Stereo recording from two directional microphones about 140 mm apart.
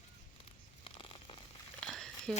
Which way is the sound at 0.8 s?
40° left (ahead or behind).